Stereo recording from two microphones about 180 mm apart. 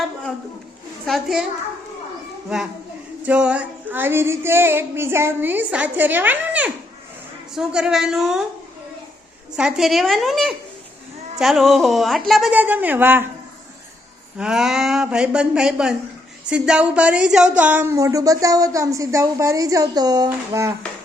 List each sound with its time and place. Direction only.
1.0 s a woman's voice: centre (ahead or behind)
3.2 s a sound: 5° right (ahead or behind)
7.5 s a woman's voice: 5° right (ahead or behind)
9.6 s a woman's voice: 5° right (ahead or behind)
14.3 s a woman's voice: 5° right (ahead or behind)
16.5 s a sound: 5° right (ahead or behind)